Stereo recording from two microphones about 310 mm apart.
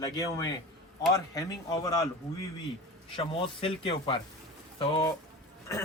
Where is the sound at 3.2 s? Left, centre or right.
Centre.